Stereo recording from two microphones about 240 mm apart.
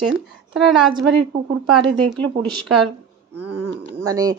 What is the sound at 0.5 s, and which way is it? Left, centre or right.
Speech, centre.